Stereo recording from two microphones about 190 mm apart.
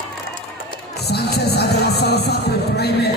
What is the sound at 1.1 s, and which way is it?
Music, 60° left (ahead or behind).